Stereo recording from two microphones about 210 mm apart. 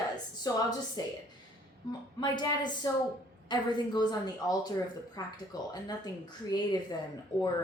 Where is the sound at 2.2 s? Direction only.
20° left (ahead or behind).